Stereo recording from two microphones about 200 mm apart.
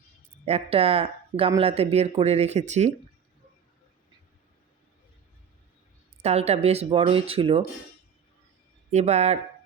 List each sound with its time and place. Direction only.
0.4 s speech: 30° right (ahead or behind)
6.2 s speech: 30° right (ahead or behind)
8.9 s speech: 35° right (ahead or behind)